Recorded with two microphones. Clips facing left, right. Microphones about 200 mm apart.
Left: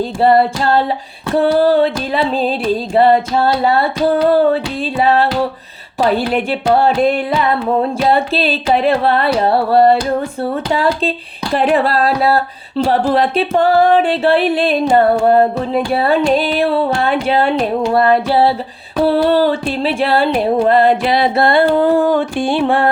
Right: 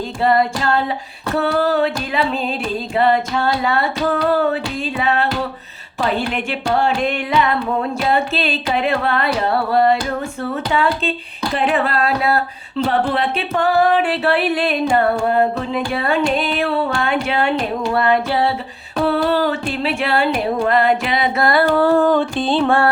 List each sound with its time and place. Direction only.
0.2 s speech: 35° left (ahead or behind); by 22.9 s 15° left (ahead or behind)